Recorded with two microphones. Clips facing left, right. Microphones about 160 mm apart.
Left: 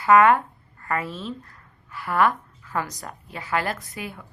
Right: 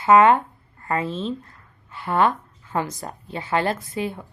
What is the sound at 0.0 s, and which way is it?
A woman's voice, 25° right (ahead or behind).